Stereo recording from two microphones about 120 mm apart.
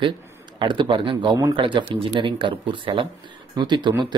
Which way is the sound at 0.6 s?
40° right (ahead or behind).